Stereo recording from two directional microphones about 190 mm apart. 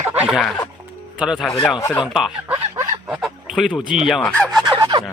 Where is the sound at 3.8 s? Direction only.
45° right (ahead or behind).